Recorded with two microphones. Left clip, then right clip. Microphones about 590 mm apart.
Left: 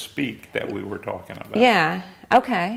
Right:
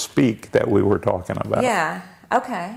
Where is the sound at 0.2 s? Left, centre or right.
Right.